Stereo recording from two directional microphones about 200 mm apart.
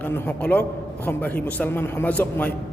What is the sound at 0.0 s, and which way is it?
A man's voice, 10° left (ahead or behind).